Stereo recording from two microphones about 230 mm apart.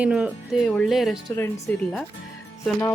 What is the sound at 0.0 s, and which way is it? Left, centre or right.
Speech, centre.